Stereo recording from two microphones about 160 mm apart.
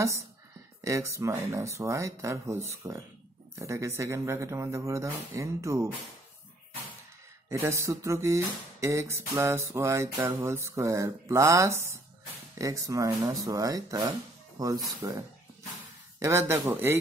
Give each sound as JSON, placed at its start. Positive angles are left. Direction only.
{"t": 0.8, "sound": "speech", "side_deg": -20}
{"t": 7.4, "sound": "music", "side_deg": -15}
{"t": 12.5, "sound": "speech", "side_deg": -20}
{"t": 16.2, "sound": "music", "side_deg": -15}